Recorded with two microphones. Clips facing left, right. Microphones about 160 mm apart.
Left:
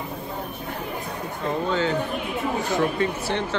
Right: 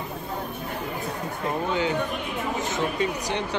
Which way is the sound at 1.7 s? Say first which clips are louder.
Left 2 dB; 15° right (ahead or behind).